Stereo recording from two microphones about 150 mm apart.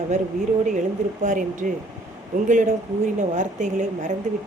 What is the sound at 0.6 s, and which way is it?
A woman's voice, 55° right (ahead or behind).